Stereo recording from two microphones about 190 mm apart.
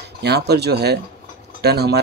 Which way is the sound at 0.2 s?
60° right (ahead or behind).